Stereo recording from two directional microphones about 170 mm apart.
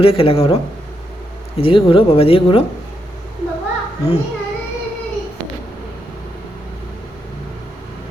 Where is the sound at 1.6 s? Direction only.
30° left (ahead or behind).